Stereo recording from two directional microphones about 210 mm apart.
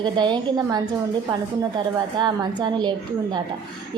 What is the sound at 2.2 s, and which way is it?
A woman's voice, 20° right (ahead or behind).